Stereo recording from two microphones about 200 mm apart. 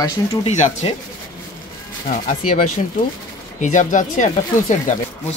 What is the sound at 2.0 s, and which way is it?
Speech, 40° left (ahead or behind).